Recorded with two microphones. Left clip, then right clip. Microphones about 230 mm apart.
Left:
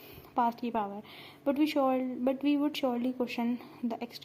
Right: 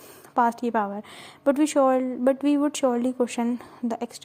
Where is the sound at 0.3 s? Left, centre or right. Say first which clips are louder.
Right 8 dB; right.